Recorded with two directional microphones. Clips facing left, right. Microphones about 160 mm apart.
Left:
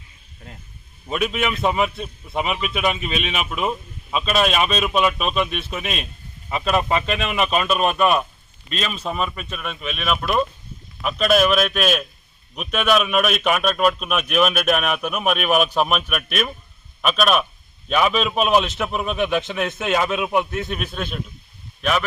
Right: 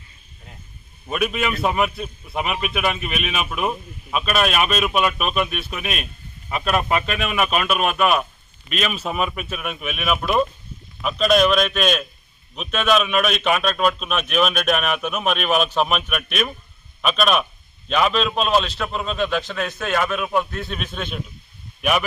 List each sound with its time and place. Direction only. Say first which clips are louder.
1.0 s a man's voice: even; centre (ahead or behind); by 20.7 s 15° left (ahead or behind)
20.7 s a man's voice: left 2 dB; 5° left (ahead or behind)
21.8 s speech: right 1 dB; 10° right (ahead or behind)